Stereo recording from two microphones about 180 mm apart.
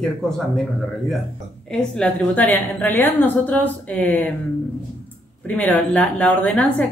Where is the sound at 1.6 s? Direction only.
5° left (ahead or behind).